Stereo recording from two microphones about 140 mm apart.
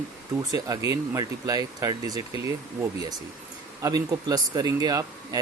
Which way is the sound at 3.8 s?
25° right (ahead or behind).